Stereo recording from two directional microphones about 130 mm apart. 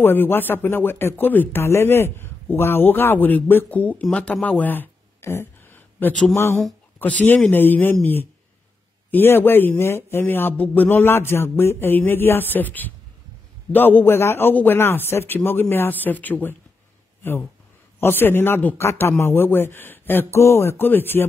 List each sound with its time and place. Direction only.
0.0 s a man's voice: 15° left (ahead or behind)